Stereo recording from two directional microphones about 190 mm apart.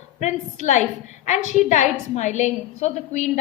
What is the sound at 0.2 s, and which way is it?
A woman's voice, 40° left (ahead or behind).